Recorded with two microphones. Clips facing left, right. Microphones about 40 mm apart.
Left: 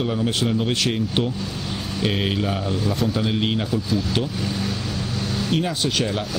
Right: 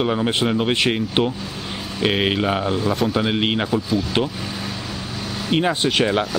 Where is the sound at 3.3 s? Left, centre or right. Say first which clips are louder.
Right 2 dB; right.